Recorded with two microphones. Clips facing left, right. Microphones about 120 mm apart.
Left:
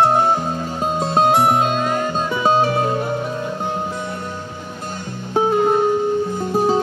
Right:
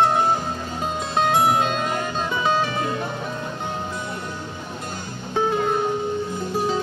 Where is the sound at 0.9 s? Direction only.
40° left (ahead or behind).